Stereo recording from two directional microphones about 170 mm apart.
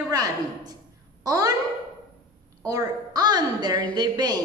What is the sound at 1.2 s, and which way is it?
Speech, 20° right (ahead or behind).